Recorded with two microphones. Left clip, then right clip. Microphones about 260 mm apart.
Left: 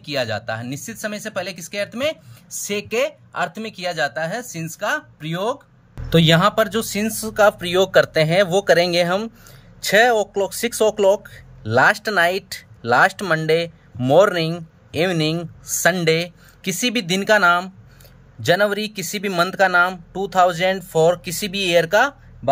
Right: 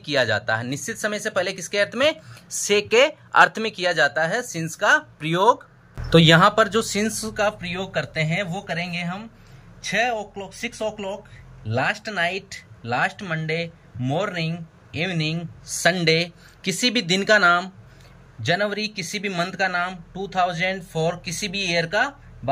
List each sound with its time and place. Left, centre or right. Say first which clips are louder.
0.0 s speech: right 2 dB; centre